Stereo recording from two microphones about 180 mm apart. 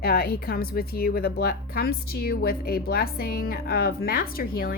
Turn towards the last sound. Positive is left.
turn(degrees=55)  # may be behind; listen again after turning